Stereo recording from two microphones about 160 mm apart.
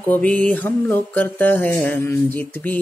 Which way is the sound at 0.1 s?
10° left (ahead or behind).